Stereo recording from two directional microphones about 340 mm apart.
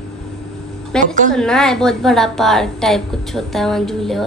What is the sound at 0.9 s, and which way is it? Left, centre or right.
A woman's voice, centre.